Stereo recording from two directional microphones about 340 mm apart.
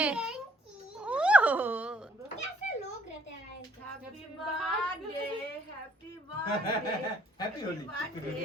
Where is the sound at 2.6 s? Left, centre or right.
Left.